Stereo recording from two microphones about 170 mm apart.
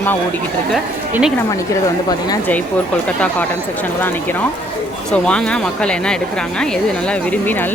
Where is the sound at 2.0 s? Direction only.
25° left (ahead or behind).